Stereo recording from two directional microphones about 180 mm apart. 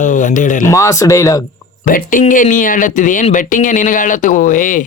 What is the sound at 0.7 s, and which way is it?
Speech, 15° left (ahead or behind).